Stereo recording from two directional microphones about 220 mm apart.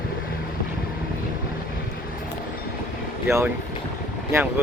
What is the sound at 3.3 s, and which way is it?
Speech, 10° right (ahead or behind).